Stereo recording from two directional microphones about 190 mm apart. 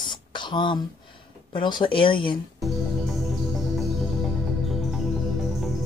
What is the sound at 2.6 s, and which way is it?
Music, centre (ahead or behind).